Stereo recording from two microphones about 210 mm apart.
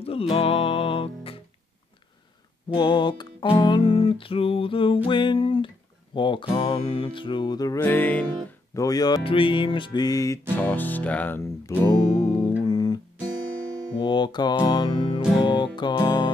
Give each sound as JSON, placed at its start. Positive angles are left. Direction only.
{"t": 0.0, "sound": "music", "side_deg": 30}
{"t": 2.7, "sound": "music", "side_deg": 20}